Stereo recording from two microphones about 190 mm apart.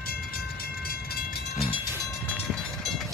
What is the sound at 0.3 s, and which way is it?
Train, 50° left (ahead or behind).